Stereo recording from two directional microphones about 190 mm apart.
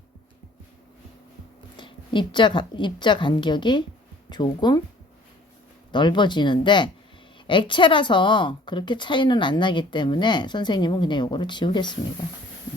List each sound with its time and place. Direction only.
1.7 s a woman's voice: 25° left (ahead or behind)
5.9 s a woman's voice: 25° left (ahead or behind)